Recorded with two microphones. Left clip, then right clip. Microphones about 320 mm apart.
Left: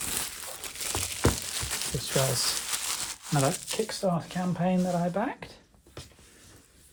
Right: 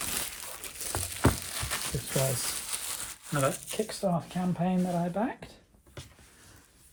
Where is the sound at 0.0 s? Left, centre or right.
Centre.